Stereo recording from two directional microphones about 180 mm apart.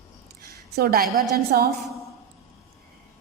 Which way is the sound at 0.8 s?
55° right (ahead or behind).